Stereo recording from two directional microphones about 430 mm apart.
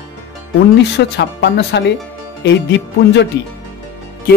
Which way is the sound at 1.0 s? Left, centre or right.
Left.